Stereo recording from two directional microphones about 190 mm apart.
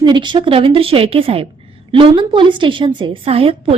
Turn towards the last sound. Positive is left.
turn(degrees=-30)  # may be behind; listen again after turning